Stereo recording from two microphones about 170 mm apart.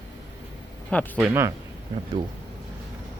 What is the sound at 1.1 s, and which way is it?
Speech, 10° right (ahead or behind).